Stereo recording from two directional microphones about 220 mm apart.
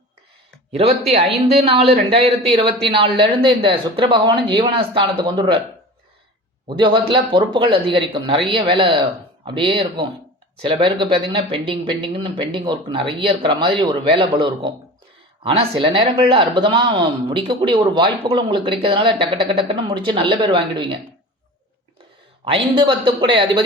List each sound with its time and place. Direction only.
0.7 s a man's voice: 30° right (ahead or behind)
6.7 s a man's voice: 20° right (ahead or behind)
22.4 s a man's voice: 25° right (ahead or behind)